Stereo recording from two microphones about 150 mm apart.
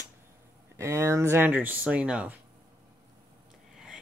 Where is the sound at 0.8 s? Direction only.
20° right (ahead or behind).